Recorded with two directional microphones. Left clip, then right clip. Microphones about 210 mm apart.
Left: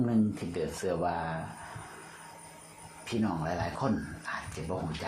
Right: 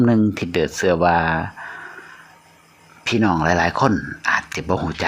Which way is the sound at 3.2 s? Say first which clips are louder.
Right 15 dB; 40° right (ahead or behind).